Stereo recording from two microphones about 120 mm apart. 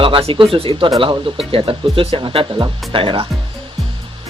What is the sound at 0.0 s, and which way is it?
Speech, 50° right (ahead or behind).